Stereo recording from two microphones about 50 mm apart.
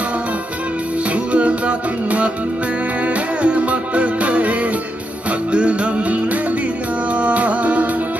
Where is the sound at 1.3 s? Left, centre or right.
Right.